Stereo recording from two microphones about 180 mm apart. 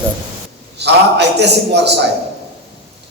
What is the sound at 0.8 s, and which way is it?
A man's voice, 70° right (ahead or behind).